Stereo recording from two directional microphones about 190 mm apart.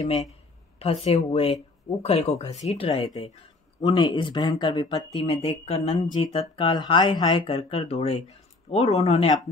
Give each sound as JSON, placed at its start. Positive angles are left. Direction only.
{"t": 0.7, "sound": "speech", "side_deg": 30}